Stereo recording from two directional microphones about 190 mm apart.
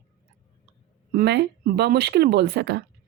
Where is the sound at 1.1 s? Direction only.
55° right (ahead or behind).